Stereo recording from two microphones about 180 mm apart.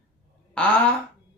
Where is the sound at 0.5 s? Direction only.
10° left (ahead or behind).